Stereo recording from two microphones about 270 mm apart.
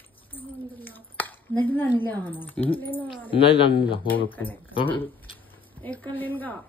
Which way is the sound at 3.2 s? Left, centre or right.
Centre.